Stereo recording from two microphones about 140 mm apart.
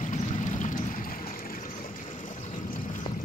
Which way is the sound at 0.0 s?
65° left (ahead or behind).